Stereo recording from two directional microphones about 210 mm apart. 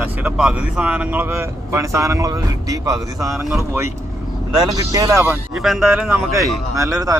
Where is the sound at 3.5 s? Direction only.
10° right (ahead or behind).